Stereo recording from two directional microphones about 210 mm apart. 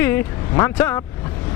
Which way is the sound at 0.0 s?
10° left (ahead or behind).